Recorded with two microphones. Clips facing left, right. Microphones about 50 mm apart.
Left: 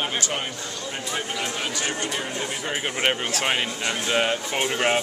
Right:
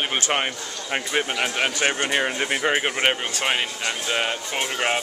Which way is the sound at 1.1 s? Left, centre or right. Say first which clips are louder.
Right 6 dB; right.